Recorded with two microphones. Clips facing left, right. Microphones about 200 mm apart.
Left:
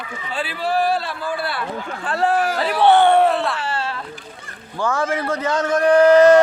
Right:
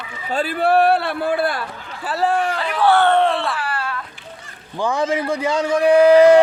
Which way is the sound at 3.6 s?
25° left (ahead or behind).